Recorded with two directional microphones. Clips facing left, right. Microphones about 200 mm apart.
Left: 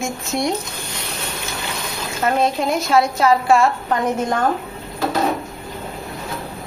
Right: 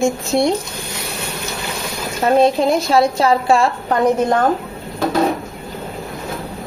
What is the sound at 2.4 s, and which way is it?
A woman's voice, 30° right (ahead or behind).